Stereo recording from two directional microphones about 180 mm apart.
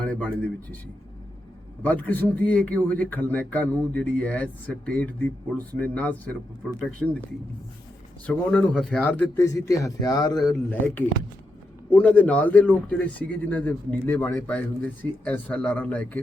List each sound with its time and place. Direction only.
0.0 s a man's voice: 5° left (ahead or behind)
1.8 s a man's voice: 10° left (ahead or behind)
8.3 s a man's voice: 5° left (ahead or behind); by 10.5 s 20° left (ahead or behind)
11.9 s a man's voice: 10° left (ahead or behind)